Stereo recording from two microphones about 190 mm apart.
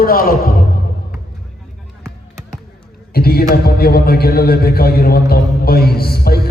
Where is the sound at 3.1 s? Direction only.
55° left (ahead or behind).